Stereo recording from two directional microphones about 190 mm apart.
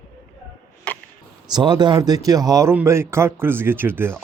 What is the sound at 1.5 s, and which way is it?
A man's voice, 20° right (ahead or behind).